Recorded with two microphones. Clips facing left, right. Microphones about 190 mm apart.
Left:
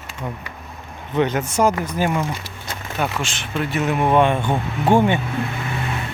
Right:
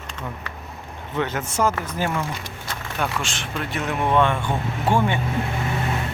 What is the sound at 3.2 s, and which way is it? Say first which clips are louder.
Speech: left 4 dB; centre (ahead or behind).